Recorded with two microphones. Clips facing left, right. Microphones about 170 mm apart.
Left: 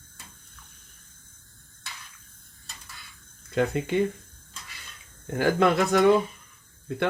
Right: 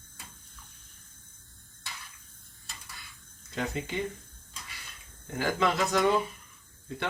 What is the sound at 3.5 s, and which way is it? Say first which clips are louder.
Speech: left 8 dB; 55° left (ahead or behind).